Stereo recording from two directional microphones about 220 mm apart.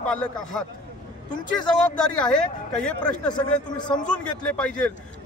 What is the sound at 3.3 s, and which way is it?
Speech, 20° left (ahead or behind).